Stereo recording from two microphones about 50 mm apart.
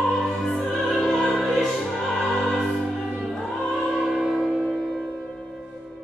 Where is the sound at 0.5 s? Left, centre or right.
Left.